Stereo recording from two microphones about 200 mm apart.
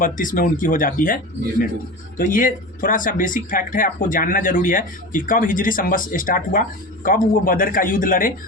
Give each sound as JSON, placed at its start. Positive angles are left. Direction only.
{"t": 0.0, "sound": "speech", "side_deg": 45}